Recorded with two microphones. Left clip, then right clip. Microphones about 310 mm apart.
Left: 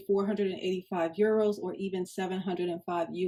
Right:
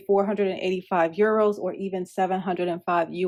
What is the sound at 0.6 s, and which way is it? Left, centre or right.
Speech, right.